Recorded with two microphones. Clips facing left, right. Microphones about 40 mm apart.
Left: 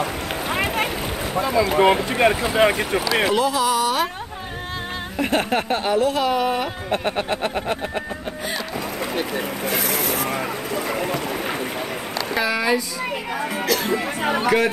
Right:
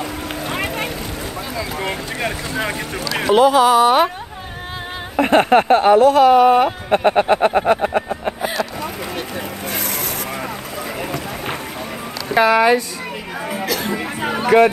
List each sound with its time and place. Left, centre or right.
0.5 s a sound: centre
1.4 s boat: centre
1.7 s speech: left
3.3 s speech: right
5.1 s speech: right
5.9 s speech: right
9.7 s vehicle: centre
12.4 s speech: right
13.7 s speech: centre